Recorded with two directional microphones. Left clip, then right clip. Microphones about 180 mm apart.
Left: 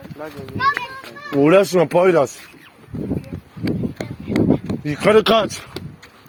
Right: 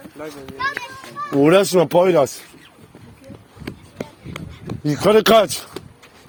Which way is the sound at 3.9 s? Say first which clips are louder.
Left 10 dB; 70° left (ahead or behind).